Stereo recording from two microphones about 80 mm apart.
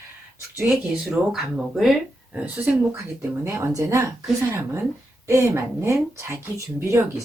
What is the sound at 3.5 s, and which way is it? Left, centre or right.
Speech, right.